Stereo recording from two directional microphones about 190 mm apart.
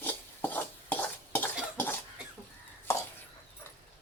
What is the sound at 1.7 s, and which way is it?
Cough, 10° left (ahead or behind).